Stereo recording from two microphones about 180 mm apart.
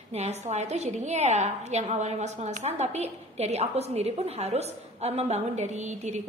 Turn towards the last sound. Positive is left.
turn(degrees=-40)  # may be behind; listen again after turning